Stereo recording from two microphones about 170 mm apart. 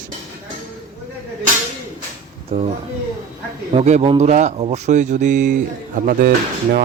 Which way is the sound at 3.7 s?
40° right (ahead or behind).